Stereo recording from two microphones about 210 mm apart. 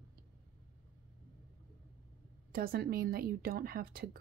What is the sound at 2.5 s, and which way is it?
Speech, 45° right (ahead or behind).